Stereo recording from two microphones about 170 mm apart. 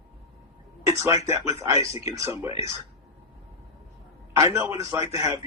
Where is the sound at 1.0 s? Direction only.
15° right (ahead or behind).